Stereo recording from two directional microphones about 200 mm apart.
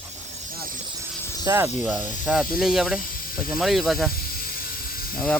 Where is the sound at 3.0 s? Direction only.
45° left (ahead or behind).